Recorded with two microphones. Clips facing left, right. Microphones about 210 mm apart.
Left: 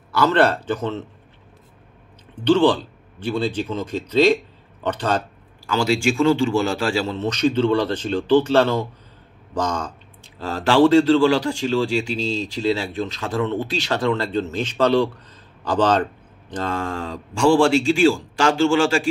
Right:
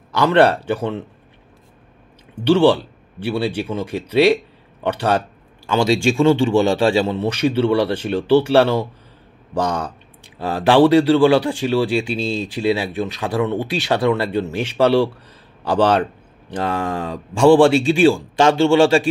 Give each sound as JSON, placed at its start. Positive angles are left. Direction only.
{"t": 0.1, "sound": "speech", "side_deg": -15}
{"t": 2.4, "sound": "speech", "side_deg": -10}
{"t": 5.7, "sound": "a man's voice", "side_deg": -25}